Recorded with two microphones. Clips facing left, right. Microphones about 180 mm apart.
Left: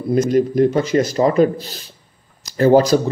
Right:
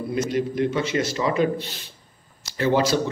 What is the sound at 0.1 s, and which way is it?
Speech, 40° left (ahead or behind).